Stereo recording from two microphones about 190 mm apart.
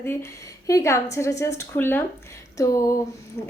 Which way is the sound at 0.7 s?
15° left (ahead or behind).